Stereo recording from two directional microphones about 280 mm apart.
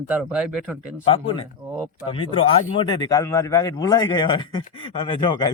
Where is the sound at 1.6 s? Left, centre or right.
Centre.